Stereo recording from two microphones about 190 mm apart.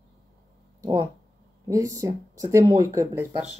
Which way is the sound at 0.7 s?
15° right (ahead or behind).